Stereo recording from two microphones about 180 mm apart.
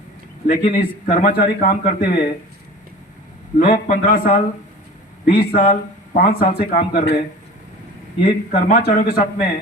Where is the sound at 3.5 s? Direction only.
45° left (ahead or behind).